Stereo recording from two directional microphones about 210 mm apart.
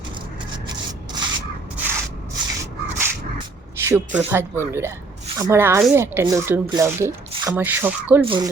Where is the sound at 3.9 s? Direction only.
10° right (ahead or behind).